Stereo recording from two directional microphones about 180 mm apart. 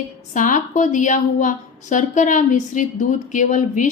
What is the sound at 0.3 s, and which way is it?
A woman's voice, 45° left (ahead or behind).